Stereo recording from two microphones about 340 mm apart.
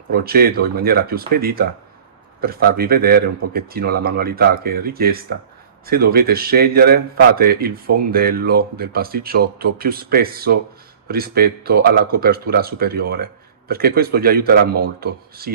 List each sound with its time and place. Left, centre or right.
0.1 s a man's voice: right